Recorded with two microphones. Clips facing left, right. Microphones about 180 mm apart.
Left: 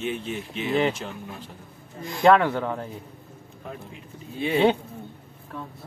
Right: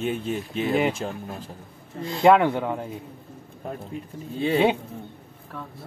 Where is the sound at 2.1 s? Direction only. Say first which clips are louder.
Right 1 dB; 15° right (ahead or behind).